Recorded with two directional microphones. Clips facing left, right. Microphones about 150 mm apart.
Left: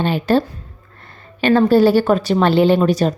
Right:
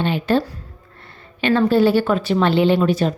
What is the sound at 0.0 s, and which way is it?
A woman's voice, 40° left (ahead or behind).